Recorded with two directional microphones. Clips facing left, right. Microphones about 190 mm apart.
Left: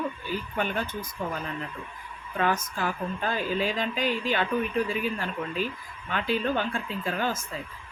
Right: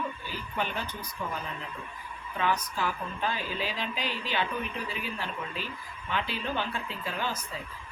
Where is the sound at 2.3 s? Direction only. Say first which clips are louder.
Left 3 dB; 45° left (ahead or behind).